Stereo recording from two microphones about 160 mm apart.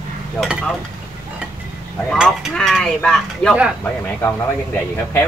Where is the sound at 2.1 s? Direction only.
Centre (ahead or behind).